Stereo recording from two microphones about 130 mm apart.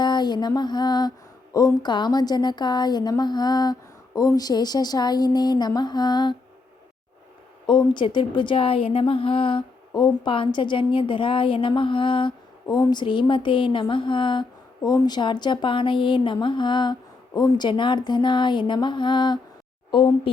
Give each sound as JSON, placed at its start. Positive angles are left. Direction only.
{"t": 0.0, "sound": "mantra", "side_deg": 35}
{"t": 1.5, "sound": "a woman's voice", "side_deg": 30}
{"t": 7.7, "sound": "a woman's voice", "side_deg": 35}